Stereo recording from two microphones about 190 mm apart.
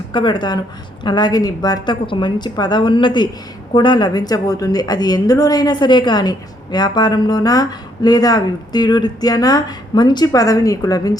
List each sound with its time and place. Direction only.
0.1 s a woman's voice: 25° left (ahead or behind)